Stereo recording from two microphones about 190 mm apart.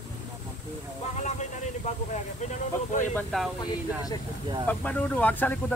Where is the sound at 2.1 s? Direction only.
40° left (ahead or behind).